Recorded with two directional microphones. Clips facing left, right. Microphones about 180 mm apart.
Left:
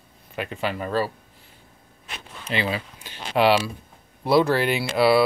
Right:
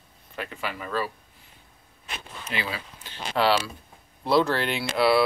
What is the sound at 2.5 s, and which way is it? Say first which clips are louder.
Speech: left 6 dB; 25° left (ahead or behind).